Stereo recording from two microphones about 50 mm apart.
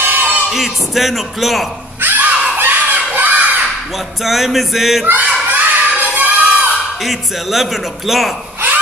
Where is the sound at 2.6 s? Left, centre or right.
Right.